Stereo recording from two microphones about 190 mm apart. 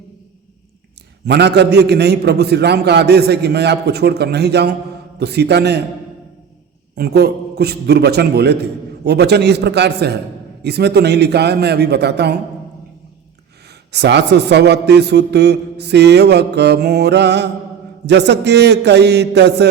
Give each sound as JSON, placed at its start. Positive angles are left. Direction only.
{"t": 1.3, "sound": "a man's voice", "side_deg": -60}
{"t": 6.9, "sound": "a man's voice", "side_deg": -55}
{"t": 13.9, "sound": "a man's voice", "side_deg": -65}